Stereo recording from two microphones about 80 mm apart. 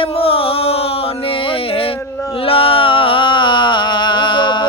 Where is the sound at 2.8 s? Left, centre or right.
Left.